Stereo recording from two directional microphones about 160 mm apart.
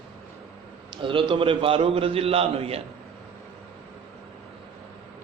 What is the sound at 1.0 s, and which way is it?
A man's voice, 30° right (ahead or behind).